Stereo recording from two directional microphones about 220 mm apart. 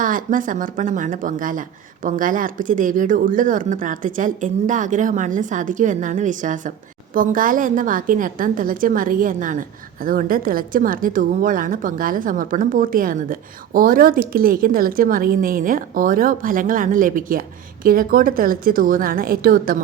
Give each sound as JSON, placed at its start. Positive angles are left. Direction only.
{"t": 0.0, "sound": "speech", "side_deg": -35}